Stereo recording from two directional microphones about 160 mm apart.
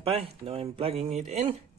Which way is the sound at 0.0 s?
35° right (ahead or behind).